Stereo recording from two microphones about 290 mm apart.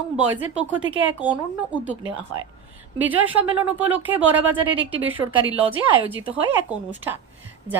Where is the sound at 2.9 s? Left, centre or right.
Centre.